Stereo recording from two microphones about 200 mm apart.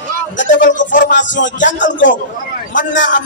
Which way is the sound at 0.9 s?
40° left (ahead or behind).